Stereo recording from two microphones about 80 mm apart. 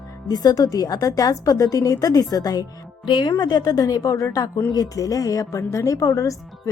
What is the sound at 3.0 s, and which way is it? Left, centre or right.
Speech, left.